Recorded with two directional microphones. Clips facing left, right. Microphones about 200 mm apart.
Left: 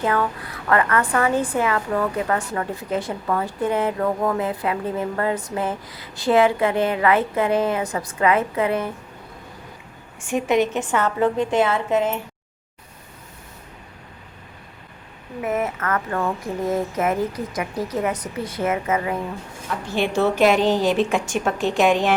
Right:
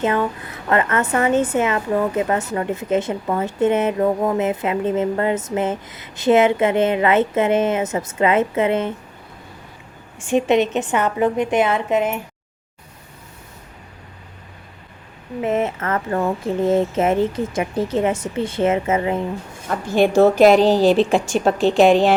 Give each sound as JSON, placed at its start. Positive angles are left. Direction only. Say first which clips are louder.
{"t": 0.0, "sound": "a woman's voice", "louder": "right 2 dB", "side_deg": -20}
{"t": 10.2, "sound": "a woman's voice", "louder": "right 3 dB", "side_deg": -25}
{"t": 15.4, "sound": "a woman's voice", "louder": "right 3 dB", "side_deg": -25}
{"t": 19.6, "sound": "a woman's voice", "louder": "right 7 dB", "side_deg": -45}